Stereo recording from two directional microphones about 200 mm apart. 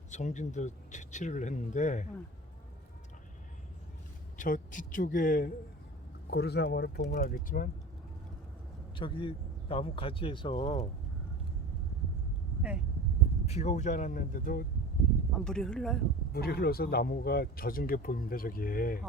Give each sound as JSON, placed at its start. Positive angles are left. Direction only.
{"t": 0.1, "sound": "speech", "side_deg": 35}
{"t": 4.4, "sound": "speech", "side_deg": 40}
{"t": 6.3, "sound": "speech", "side_deg": 55}
{"t": 9.0, "sound": "speech", "side_deg": 25}
{"t": 13.4, "sound": "speech", "side_deg": 35}
{"t": 15.3, "sound": "speech", "side_deg": 5}
{"t": 16.3, "sound": "speech", "side_deg": 50}